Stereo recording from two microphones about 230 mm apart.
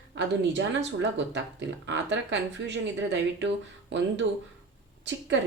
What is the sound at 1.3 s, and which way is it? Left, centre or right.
A woman's voice, right.